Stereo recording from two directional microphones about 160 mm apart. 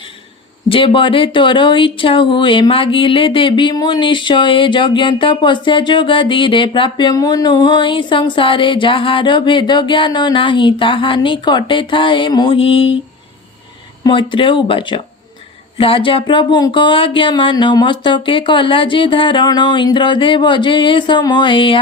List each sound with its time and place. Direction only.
0.7 s speech: 30° left (ahead or behind)
14.0 s speech: 30° left (ahead or behind)